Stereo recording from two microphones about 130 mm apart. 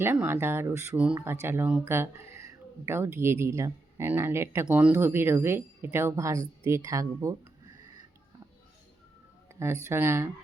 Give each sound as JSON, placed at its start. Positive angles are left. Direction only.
{"t": 0.0, "sound": "speech", "side_deg": -15}
{"t": 0.9, "sound": "speech", "side_deg": -10}
{"t": 9.6, "sound": "speech", "side_deg": -20}